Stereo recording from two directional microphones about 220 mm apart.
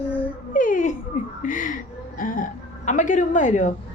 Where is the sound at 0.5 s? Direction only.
35° left (ahead or behind).